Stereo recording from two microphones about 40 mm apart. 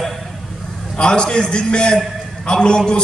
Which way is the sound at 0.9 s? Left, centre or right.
Left.